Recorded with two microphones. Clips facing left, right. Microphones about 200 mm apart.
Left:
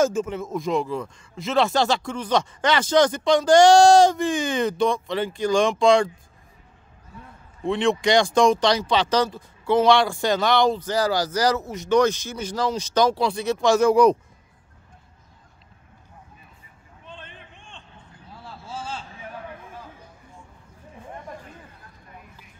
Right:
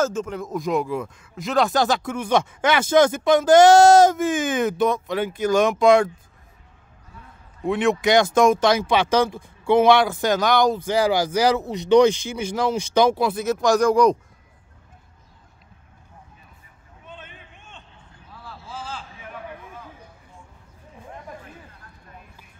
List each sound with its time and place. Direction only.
0.0 s speech: 10° left (ahead or behind)
7.6 s speech: 5° right (ahead or behind)
10.7 s speech: 10° right (ahead or behind); by 14.1 s 5° left (ahead or behind)
17.0 s a sound: 5° right (ahead or behind)
18.3 s vehicle: 25° left (ahead or behind)